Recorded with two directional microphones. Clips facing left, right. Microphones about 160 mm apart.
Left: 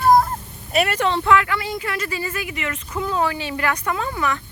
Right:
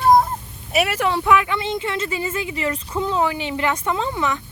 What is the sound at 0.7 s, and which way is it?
Speech, 5° right (ahead or behind).